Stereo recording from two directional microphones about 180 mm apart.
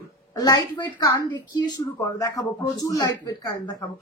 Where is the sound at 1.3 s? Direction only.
20° left (ahead or behind).